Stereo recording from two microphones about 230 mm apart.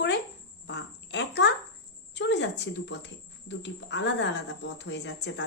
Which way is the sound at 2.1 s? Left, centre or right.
Left.